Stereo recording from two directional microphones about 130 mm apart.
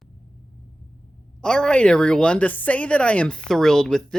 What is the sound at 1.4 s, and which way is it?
A woman's voice, 5° left (ahead or behind).